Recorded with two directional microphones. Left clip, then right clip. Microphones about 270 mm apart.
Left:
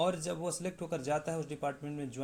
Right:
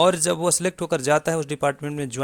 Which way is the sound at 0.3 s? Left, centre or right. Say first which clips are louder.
Right 15 dB; right.